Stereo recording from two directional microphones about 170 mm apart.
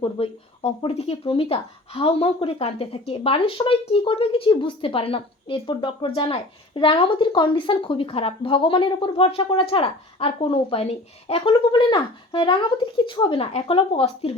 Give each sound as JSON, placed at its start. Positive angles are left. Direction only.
{"t": 0.0, "sound": "speech", "side_deg": 30}